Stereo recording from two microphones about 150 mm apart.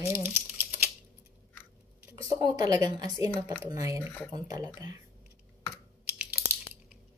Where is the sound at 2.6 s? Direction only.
25° right (ahead or behind).